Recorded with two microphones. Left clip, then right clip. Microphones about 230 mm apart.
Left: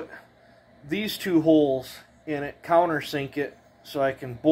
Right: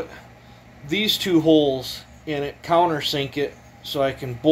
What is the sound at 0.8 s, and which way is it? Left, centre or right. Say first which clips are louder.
Speech: right 7 dB; left.